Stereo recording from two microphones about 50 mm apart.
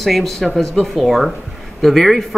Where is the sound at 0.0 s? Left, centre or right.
Centre.